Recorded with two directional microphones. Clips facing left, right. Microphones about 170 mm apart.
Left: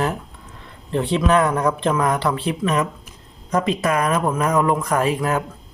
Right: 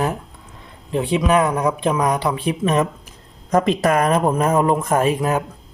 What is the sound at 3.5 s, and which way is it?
Speech, 40° right (ahead or behind).